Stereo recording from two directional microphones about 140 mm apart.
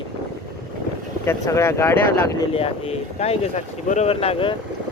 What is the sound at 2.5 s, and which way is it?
Speech, 45° left (ahead or behind).